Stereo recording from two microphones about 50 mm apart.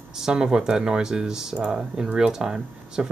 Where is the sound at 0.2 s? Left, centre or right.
Centre.